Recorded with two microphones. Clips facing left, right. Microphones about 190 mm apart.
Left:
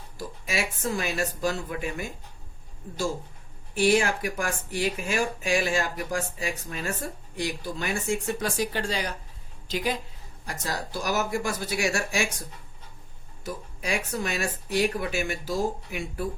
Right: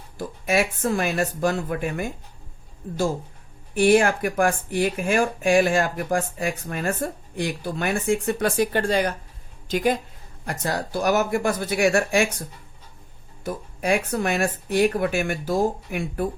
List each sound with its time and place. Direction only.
0.2 s speech: 55° right (ahead or behind)
3.8 s a woman's voice: 55° right (ahead or behind)
10.4 s speech: 60° right (ahead or behind)
13.4 s speech: 55° right (ahead or behind)